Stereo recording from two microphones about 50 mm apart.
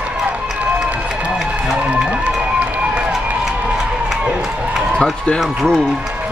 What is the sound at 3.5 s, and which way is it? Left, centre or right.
Crowd, right.